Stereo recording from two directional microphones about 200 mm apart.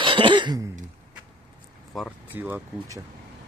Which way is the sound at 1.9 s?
Centre (ahead or behind).